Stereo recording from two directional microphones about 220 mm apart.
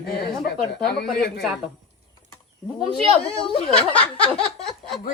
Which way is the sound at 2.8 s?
25° left (ahead or behind).